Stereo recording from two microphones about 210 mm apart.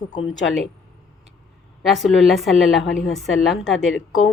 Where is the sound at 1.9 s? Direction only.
Centre (ahead or behind).